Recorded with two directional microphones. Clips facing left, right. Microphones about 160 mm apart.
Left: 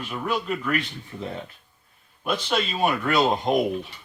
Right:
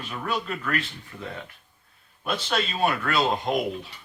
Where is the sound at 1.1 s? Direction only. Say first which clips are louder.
Left 5 dB; 20° left (ahead or behind).